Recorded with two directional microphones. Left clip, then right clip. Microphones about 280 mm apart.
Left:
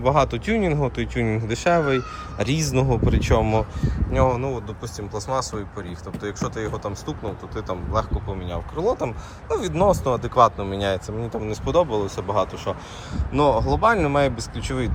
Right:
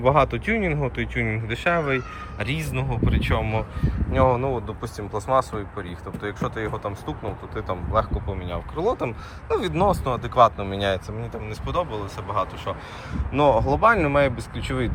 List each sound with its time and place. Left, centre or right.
0.0 s speech: centre
13.3 s speech: centre